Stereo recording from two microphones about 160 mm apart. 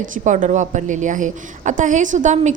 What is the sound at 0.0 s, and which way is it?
A woman's voice, 55° right (ahead or behind).